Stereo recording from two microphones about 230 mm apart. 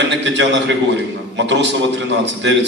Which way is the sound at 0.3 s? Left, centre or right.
Right.